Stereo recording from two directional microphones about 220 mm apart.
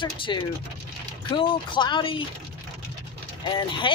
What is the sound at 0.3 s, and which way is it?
Speech, 20° left (ahead or behind).